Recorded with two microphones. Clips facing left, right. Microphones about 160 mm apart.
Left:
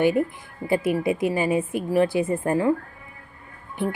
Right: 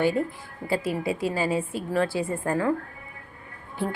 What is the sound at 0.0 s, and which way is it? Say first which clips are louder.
A woman's voice: left 3 dB; 15° left (ahead or behind).